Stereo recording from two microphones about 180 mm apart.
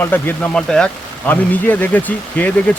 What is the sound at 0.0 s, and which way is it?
Speech, 10° left (ahead or behind).